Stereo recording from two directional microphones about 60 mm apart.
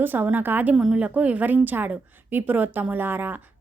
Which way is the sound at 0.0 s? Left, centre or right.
Right.